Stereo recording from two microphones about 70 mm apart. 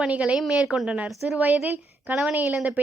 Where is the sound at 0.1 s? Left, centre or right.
Centre.